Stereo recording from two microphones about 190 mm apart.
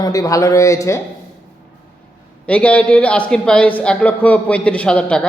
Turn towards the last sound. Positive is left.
turn(degrees=5)  # may be behind; listen again after turning